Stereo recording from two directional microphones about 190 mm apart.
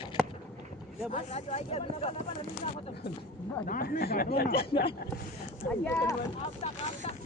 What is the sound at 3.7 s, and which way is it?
Speech, 50° left (ahead or behind).